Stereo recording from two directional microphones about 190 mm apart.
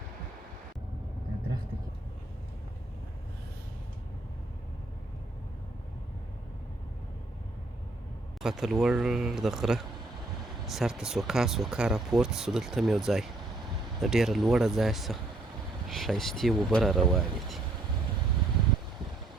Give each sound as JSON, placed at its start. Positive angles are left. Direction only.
{"t": 8.4, "sound": "speech", "side_deg": 0}